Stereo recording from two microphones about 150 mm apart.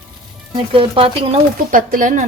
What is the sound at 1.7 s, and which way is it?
Speech, 60° right (ahead or behind).